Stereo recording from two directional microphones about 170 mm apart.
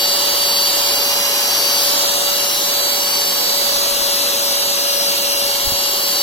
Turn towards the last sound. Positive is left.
turn(degrees=30)  # may be behind; listen again after turning